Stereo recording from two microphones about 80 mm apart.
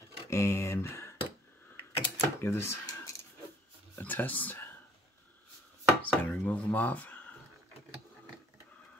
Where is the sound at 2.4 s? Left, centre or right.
Left.